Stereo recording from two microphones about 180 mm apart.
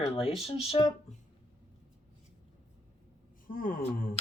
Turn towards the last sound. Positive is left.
turn(degrees=50)  # may be behind; listen again after turning